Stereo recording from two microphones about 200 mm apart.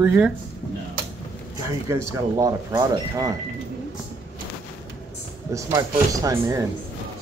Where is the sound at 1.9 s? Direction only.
15° right (ahead or behind).